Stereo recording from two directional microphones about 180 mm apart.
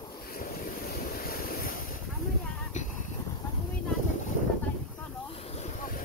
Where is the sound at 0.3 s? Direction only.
55° left (ahead or behind).